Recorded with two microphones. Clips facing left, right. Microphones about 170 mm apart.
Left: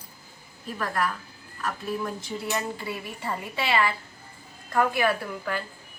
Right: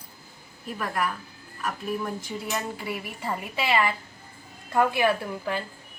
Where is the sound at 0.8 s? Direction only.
10° right (ahead or behind).